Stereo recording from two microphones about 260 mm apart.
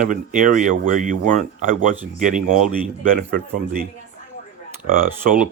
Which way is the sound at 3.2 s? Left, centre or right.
Right.